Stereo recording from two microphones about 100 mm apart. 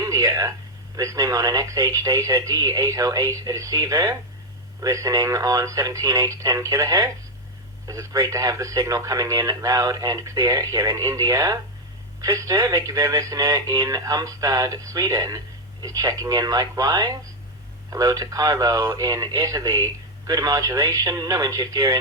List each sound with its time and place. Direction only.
0.0 s speech: 35° right (ahead or behind)